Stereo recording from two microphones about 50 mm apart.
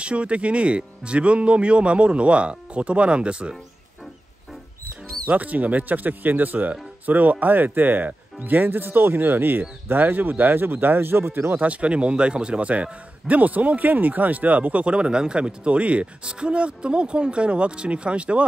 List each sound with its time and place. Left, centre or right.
0.0 s a man's voice: right
5.3 s speech: right
11.6 s a man's voice: right